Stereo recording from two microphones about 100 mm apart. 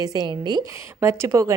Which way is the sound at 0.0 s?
40° right (ahead or behind).